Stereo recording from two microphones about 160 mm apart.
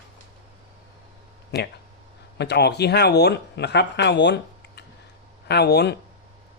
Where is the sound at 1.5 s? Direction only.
90° left.